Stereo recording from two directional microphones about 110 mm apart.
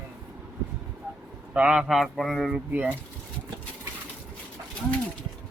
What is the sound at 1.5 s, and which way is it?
Speech, 10° right (ahead or behind).